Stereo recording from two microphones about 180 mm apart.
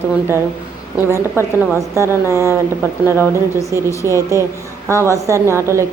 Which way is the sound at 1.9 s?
15° right (ahead or behind).